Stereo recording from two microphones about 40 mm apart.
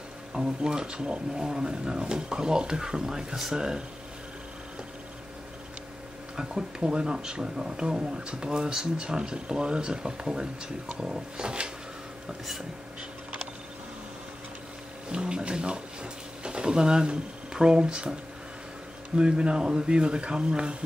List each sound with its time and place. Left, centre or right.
0.3 s speech: centre
6.3 s speech: right
15.0 s a sound: right
19.1 s speech: right